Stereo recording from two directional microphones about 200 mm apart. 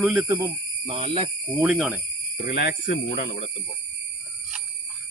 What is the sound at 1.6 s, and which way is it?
Speech, 5° right (ahead or behind).